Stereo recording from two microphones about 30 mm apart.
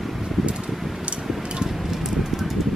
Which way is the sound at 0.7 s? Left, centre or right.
Centre.